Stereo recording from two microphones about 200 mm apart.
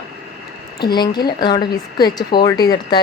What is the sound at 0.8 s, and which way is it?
Speech, 20° left (ahead or behind).